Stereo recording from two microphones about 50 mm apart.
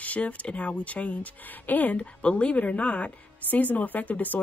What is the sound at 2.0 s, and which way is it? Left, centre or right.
Speech, left.